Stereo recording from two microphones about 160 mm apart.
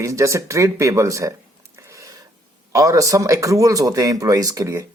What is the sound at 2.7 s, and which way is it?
Speech, 20° right (ahead or behind).